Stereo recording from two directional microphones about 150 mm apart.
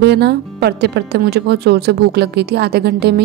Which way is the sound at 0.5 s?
90° right.